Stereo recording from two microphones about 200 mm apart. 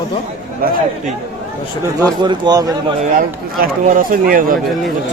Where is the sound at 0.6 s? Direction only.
45° right (ahead or behind).